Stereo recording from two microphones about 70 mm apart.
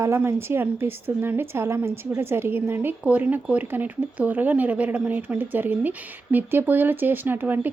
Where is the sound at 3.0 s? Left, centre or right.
Centre.